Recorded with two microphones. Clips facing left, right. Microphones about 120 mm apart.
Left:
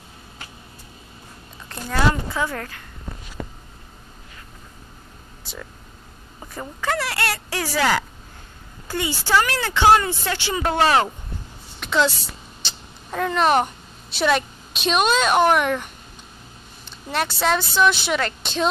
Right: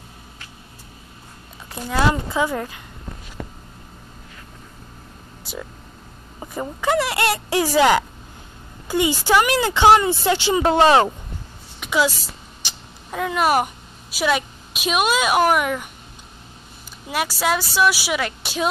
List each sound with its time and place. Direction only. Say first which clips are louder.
1.7 s speech: right 1 dB; 10° right (ahead or behind)
5.4 s air conditioning: right 5 dB; 10° right (ahead or behind)
6.4 s speech: right 4 dB; 20° right (ahead or behind)
11.8 s a sound: even; 5° right (ahead or behind)
12.6 s vehicle: right 1 dB; 5° right (ahead or behind)
14.1 s a woman's voice: left 1 dB; 5° right (ahead or behind)
17.1 s speech: even; 5° right (ahead or behind)